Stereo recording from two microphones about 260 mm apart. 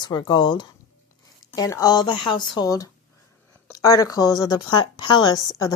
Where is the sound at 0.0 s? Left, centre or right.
Centre.